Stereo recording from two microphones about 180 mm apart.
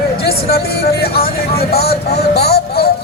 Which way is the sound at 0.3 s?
60° left (ahead or behind).